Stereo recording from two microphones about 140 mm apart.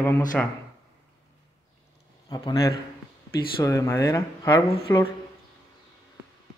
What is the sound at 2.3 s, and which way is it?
Speech, 25° left (ahead or behind).